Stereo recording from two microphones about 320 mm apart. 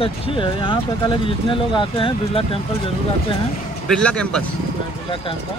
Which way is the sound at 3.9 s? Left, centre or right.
Centre.